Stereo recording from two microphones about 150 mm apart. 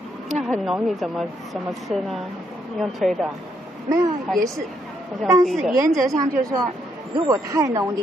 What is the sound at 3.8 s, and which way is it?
Speech, 20° right (ahead or behind).